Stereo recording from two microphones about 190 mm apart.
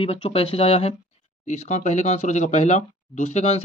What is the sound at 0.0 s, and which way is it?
Speech, 30° left (ahead or behind).